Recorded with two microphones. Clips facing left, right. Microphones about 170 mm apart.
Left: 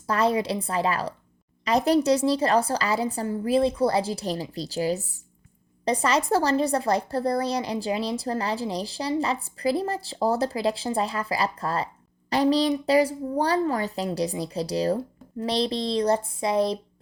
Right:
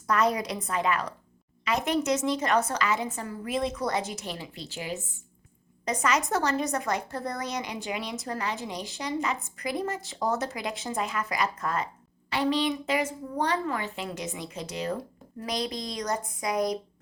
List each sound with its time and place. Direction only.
0.1 s speech: 30° left (ahead or behind)